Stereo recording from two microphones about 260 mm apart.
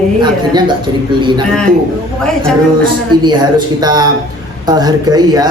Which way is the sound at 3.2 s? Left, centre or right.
Centre.